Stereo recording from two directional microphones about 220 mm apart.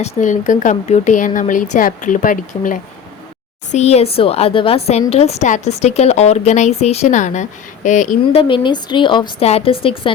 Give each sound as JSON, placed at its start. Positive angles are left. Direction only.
{"t": 0.0, "sound": "a woman's voice", "side_deg": 35}